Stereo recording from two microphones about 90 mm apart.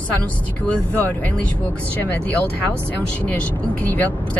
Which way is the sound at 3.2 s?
15° left (ahead or behind).